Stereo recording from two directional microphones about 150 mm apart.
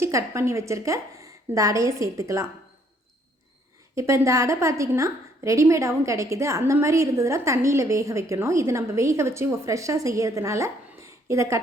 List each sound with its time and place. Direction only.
0.0 s a woman's voice: 20° right (ahead or behind)
3.9 s a woman's voice: 20° right (ahead or behind)